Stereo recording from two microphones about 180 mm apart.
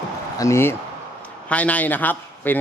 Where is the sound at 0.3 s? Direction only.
15° left (ahead or behind).